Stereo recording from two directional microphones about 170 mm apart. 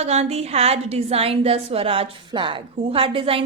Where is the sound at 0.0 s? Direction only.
40° right (ahead or behind).